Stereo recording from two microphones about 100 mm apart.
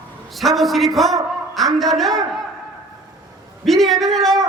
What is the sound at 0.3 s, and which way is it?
Speech, centre (ahead or behind).